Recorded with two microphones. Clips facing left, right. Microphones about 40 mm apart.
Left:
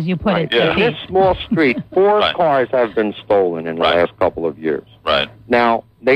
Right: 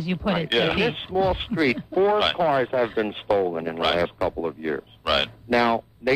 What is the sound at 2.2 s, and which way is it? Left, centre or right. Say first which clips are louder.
A man's voice: left 7 dB; centre.